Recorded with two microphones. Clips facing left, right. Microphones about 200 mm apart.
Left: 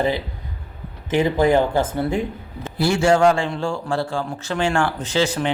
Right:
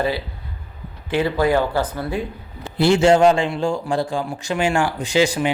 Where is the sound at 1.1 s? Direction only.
15° left (ahead or behind).